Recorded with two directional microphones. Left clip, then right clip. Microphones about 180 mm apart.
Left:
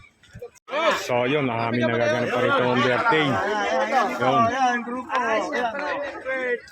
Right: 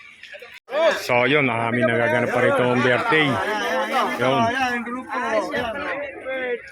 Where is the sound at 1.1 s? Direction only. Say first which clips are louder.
Right 4 dB; centre (ahead or behind).